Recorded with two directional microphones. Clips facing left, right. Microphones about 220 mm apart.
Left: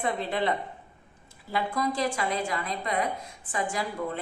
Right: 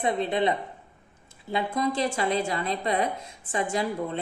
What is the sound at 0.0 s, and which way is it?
A woman's voice, 20° right (ahead or behind).